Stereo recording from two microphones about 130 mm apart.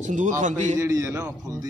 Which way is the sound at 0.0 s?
75° right (ahead or behind).